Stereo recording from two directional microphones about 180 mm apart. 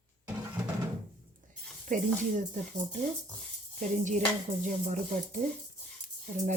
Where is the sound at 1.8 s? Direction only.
45° right (ahead or behind).